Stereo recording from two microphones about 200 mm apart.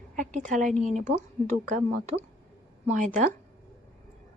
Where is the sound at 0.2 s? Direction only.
40° right (ahead or behind).